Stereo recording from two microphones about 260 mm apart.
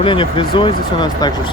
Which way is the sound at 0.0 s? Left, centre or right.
Centre.